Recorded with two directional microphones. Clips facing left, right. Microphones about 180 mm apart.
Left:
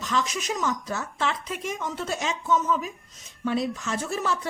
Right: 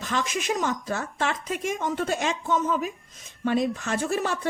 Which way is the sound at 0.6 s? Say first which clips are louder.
Right 1 dB; 55° right (ahead or behind).